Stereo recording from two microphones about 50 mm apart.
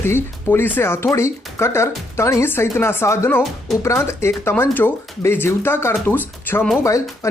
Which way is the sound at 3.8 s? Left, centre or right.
Left.